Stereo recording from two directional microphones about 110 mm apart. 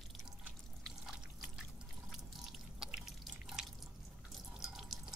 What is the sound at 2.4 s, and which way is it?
Drip, 5° right (ahead or behind).